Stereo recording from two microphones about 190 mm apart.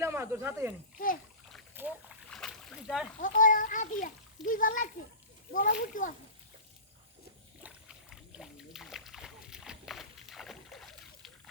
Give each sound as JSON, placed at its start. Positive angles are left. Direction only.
{"t": 0.0, "sound": "speech", "side_deg": -15}
{"t": 0.9, "sound": "a child's voice", "side_deg": 45}
{"t": 1.7, "sound": "boat", "side_deg": -10}
{"t": 2.3, "sound": "boat", "side_deg": 5}
{"t": 3.2, "sound": "a child's voice", "side_deg": 45}
{"t": 7.6, "sound": "splash", "side_deg": -5}